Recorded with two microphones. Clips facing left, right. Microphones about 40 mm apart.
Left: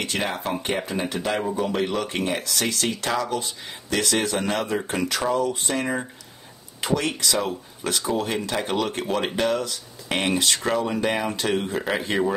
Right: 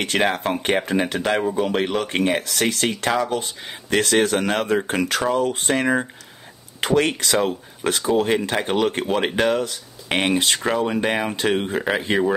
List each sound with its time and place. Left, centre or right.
0.2 s speech: right
1.6 s speech: right